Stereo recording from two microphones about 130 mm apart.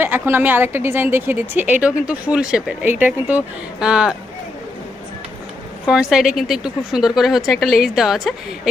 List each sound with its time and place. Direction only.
0.0 s speech: 15° right (ahead or behind)
5.8 s speech: 5° right (ahead or behind)